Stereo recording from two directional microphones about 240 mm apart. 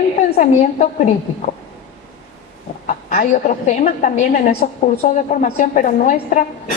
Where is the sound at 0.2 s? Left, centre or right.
Left.